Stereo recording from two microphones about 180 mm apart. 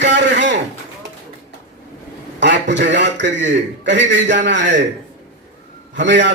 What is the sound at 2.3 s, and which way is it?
A man's voice, 75° right (ahead or behind).